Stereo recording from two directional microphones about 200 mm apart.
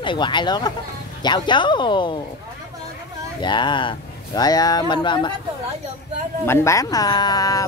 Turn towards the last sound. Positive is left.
turn(degrees=15)  # may be behind; listen again after turning